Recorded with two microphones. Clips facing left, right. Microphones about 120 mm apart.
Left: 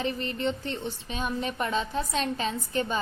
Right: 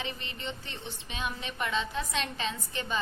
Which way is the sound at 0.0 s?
45° left (ahead or behind).